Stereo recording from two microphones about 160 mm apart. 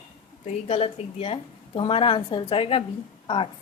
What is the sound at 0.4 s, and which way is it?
A woman's voice, 40° left (ahead or behind).